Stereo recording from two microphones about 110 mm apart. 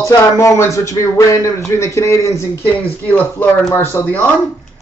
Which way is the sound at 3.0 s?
15° left (ahead or behind).